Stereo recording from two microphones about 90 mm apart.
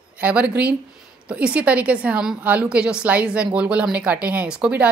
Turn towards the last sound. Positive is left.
turn(degrees=-15)  # may be behind; listen again after turning